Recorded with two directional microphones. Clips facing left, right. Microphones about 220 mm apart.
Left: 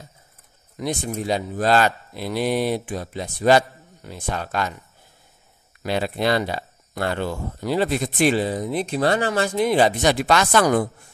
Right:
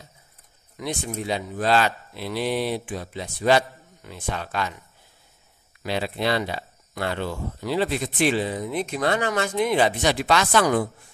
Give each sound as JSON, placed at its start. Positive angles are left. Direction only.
{"t": 0.7, "sound": "speech", "side_deg": 40}
{"t": 5.8, "sound": "speech", "side_deg": 45}